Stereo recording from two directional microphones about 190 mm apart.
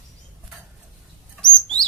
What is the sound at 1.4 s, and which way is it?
Bird, 5° left (ahead or behind).